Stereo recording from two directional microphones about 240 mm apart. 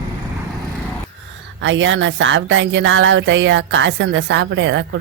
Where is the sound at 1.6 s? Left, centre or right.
Right.